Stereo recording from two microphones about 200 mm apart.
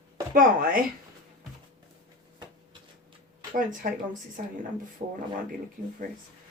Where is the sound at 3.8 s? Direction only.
45° right (ahead or behind).